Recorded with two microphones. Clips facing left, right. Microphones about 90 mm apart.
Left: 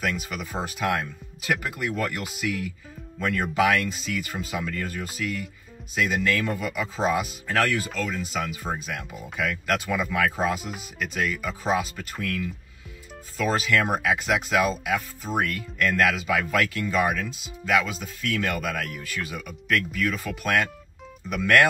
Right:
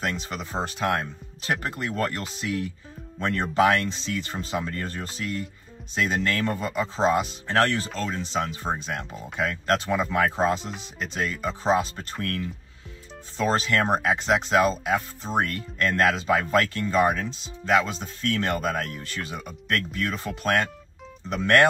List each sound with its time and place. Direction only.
0.3 s speech: 30° right (ahead or behind)
13.7 s speech: 35° right (ahead or behind)